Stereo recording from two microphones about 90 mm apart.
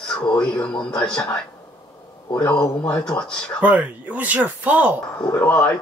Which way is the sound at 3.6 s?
15° right (ahead or behind).